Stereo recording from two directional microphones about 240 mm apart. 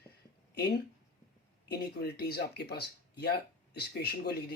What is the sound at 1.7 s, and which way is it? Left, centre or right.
Speech, left.